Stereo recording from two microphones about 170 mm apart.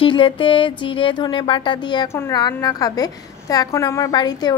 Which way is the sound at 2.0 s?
15° left (ahead or behind).